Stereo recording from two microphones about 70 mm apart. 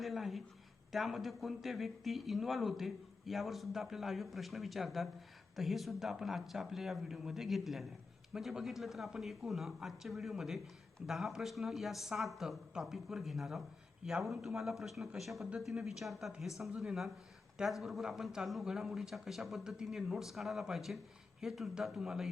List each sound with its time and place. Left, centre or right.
0.0 s speech: centre